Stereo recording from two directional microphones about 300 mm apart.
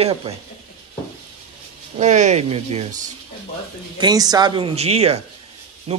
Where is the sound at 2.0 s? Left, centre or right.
Right.